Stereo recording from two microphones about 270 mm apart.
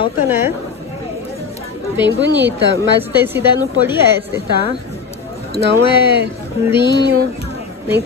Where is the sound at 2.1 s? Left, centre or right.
Right.